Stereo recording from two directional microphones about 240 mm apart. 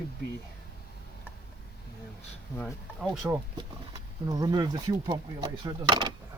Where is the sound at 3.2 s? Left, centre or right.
Centre.